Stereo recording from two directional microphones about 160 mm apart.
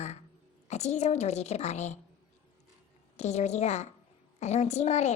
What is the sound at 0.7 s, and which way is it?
A woman's voice, 45° left (ahead or behind).